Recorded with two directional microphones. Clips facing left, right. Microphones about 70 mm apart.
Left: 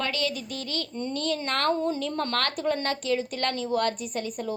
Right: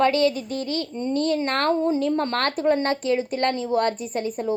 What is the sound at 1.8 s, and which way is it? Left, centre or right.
Speech, right.